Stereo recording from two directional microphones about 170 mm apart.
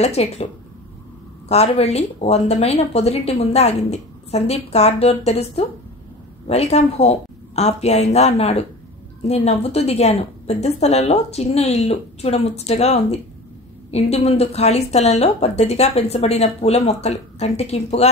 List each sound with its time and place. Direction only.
0.0 s a woman's voice: 40° left (ahead or behind)
1.5 s a woman's voice: 40° left (ahead or behind)